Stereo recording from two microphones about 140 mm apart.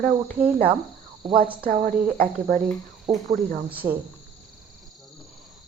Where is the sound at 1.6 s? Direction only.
90° right.